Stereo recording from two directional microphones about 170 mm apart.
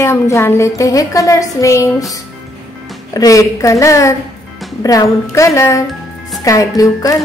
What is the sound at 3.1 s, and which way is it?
A woman's voice, 20° left (ahead or behind).